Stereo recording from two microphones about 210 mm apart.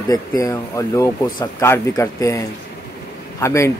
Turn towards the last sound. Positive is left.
turn(degrees=15)  # may be behind; listen again after turning